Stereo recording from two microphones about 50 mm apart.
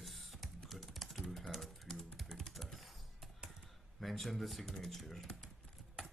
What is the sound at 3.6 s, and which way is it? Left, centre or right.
Speech, centre.